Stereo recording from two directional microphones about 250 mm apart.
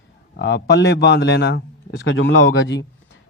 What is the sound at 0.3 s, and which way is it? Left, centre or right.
A man's voice, left.